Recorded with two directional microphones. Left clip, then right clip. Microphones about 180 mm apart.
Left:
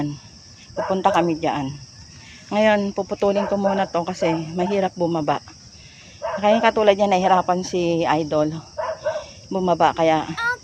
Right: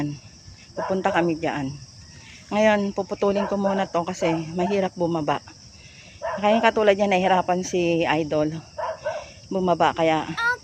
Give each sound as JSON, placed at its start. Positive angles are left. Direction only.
{"t": 0.8, "sound": "speech", "side_deg": 0}